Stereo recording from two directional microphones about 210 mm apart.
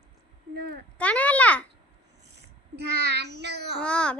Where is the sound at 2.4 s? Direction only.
55° right (ahead or behind).